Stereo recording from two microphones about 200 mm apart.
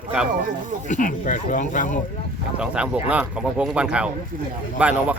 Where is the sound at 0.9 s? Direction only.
40° left (ahead or behind).